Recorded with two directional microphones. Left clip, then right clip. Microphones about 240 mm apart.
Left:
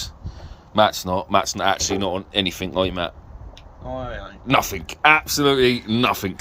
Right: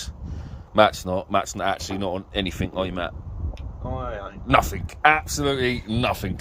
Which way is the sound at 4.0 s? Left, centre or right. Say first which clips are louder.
Even; right.